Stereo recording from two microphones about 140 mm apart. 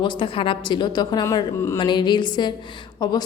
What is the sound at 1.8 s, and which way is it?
Speech, 35° left (ahead or behind).